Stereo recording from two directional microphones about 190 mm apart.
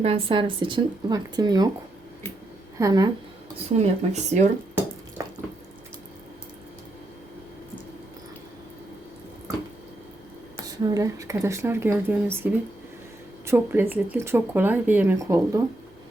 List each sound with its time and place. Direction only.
0.0 s speech: 30° right (ahead or behind)
2.7 s speech: 20° right (ahead or behind)
3.8 s speech: 35° right (ahead or behind)
10.7 s speech: 20° right (ahead or behind)